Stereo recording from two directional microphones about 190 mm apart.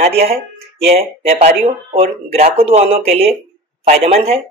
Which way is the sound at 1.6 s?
30° right (ahead or behind).